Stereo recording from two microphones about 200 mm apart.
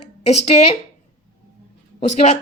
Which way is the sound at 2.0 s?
35° left (ahead or behind).